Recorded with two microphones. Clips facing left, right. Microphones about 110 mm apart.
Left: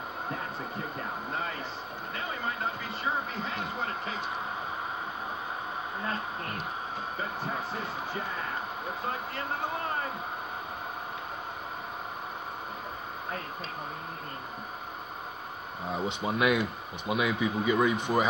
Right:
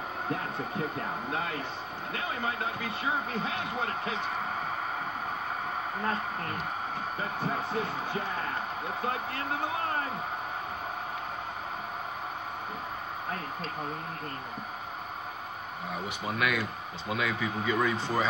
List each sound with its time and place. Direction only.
2.8 s speech: 65° right (ahead or behind)
15.9 s speech: 25° left (ahead or behind)